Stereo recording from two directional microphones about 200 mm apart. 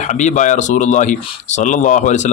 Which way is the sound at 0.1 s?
35° left (ahead or behind).